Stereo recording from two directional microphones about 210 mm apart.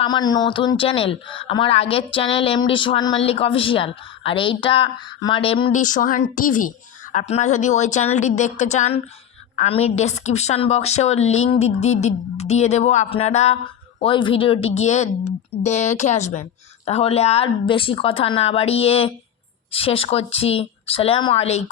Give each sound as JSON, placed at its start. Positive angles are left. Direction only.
{"t": 0.0, "sound": "speech", "side_deg": 20}
{"t": 5.7, "sound": "a woman's voice", "side_deg": 40}